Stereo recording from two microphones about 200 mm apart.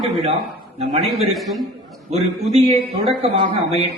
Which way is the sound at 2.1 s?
30° right (ahead or behind).